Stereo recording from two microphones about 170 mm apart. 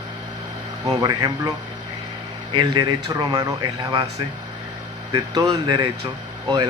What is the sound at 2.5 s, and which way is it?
Speech, 30° right (ahead or behind).